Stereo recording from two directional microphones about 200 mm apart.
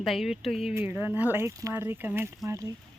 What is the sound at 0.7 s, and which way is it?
Speech, 10° right (ahead or behind).